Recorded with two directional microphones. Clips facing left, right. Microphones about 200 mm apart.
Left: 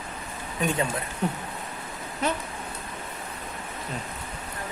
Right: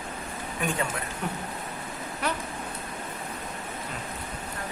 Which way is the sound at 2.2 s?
20° left (ahead or behind).